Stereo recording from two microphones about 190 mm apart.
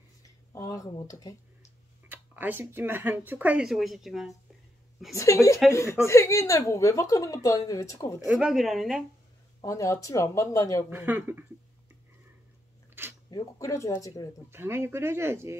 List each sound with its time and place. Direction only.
0.5 s speech: 15° left (ahead or behind)
2.0 s speech: 10° right (ahead or behind)
5.1 s a woman's voice: 15° left (ahead or behind)
8.3 s speech: 5° right (ahead or behind)
9.6 s a woman's voice: 15° left (ahead or behind)
10.9 s speech: 10° right (ahead or behind)
13.0 s a sound: 10° right (ahead or behind)
13.3 s a woman's voice: 20° left (ahead or behind)
14.5 s speech: 15° right (ahead or behind)